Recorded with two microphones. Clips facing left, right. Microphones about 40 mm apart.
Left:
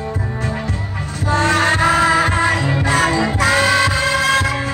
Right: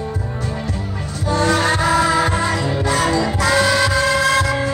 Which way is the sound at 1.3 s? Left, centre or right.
Left.